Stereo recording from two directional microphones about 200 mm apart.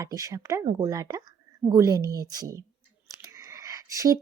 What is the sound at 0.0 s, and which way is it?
Speech, 15° right (ahead or behind).